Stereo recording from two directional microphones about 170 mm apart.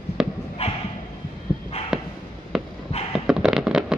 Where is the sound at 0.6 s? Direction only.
40° left (ahead or behind).